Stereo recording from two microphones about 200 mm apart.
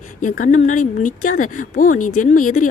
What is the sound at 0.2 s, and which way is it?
Speech, 40° left (ahead or behind).